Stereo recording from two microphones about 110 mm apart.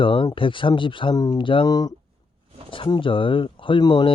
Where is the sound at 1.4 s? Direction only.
50° left (ahead or behind).